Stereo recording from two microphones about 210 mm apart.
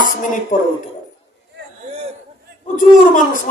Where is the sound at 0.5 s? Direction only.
40° left (ahead or behind).